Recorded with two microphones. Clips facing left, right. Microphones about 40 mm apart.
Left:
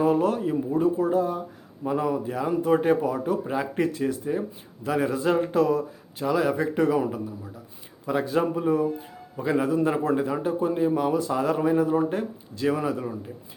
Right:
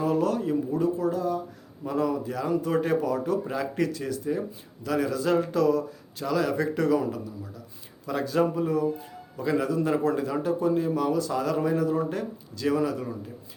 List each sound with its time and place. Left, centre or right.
0.0 s speech: left